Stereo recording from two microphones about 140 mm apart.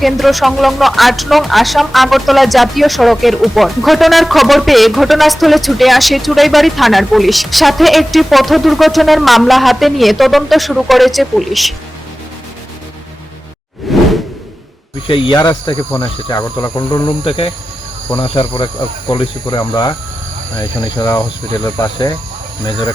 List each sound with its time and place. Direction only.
0.0 s speech: centre (ahead or behind)
13.9 s whoosh: centre (ahead or behind)
15.0 s speech: 40° left (ahead or behind)
15.4 s speech: 25° left (ahead or behind)